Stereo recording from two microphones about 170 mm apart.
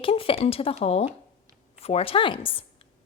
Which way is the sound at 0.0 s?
35° left (ahead or behind).